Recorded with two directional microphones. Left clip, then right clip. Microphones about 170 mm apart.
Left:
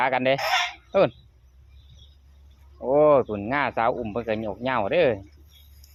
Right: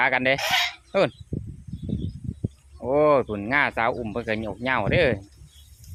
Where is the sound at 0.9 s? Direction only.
30° right (ahead or behind).